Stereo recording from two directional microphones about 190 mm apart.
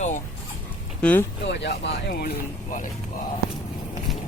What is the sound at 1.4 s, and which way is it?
Speech, 65° left (ahead or behind).